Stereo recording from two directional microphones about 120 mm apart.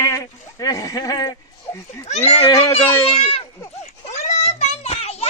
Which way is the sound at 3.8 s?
70° left (ahead or behind).